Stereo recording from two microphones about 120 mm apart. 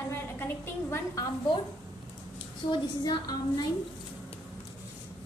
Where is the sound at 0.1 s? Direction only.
20° left (ahead or behind).